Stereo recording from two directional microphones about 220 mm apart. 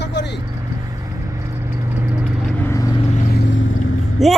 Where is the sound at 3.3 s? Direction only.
55° left (ahead or behind).